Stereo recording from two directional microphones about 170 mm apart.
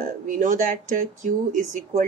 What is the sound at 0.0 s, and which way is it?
Speech, 50° right (ahead or behind).